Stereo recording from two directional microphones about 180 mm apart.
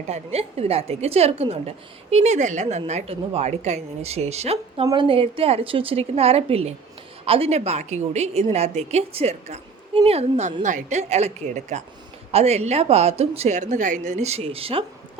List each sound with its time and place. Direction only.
0.1 s a woman's voice: 35° right (ahead or behind)